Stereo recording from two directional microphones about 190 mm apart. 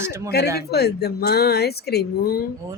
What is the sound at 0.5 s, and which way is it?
A woman's voice, 60° left (ahead or behind).